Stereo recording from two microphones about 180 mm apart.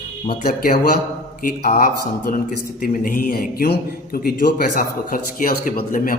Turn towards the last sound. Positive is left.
turn(degrees=50)  # may be behind; listen again after turning